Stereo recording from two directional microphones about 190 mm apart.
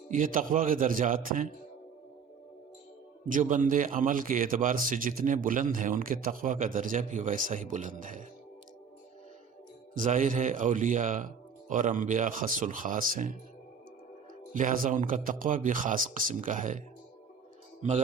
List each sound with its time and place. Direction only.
0.1 s a man's voice: 45° right (ahead or behind)
3.2 s a man's voice: 45° right (ahead or behind)
9.9 s a man's voice: 40° right (ahead or behind)
14.5 s a man's voice: 45° right (ahead or behind)